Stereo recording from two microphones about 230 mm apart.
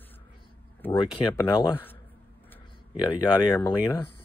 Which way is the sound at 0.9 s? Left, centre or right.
Left.